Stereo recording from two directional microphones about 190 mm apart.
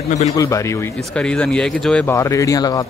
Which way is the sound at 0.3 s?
15° left (ahead or behind).